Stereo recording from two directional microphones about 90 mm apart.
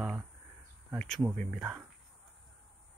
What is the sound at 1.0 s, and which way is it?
Speech, 5° left (ahead or behind).